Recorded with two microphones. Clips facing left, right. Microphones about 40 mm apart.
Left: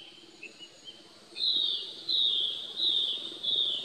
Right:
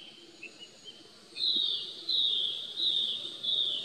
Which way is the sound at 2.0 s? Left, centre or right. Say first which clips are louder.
Left 1 dB; centre.